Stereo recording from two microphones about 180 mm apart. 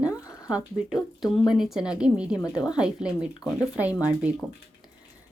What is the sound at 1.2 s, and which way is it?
Speech, centre (ahead or behind).